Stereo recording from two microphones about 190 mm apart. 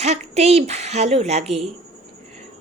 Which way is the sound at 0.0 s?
35° right (ahead or behind).